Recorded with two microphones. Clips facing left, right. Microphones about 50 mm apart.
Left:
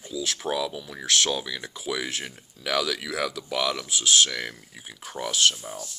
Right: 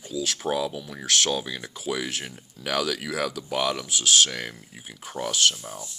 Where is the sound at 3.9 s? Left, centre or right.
Left.